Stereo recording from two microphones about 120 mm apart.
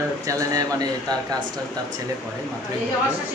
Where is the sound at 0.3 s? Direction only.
30° right (ahead or behind).